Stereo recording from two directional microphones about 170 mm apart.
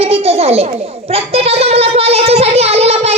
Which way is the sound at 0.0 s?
35° right (ahead or behind).